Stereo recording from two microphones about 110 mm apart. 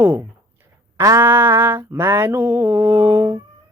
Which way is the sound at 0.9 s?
25° right (ahead or behind).